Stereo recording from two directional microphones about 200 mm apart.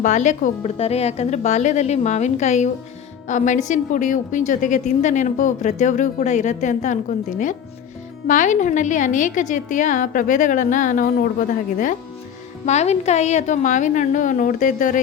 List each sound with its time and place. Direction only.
0.0 s a woman's voice: 35° left (ahead or behind)